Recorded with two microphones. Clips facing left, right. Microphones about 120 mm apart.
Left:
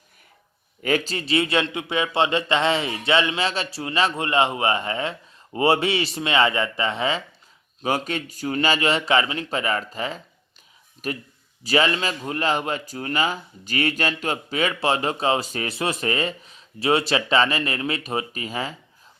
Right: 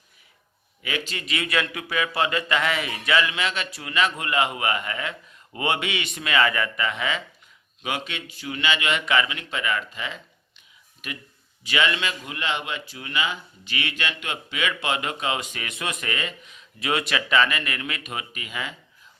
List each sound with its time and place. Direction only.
0.8 s a man's voice: 40° left (ahead or behind)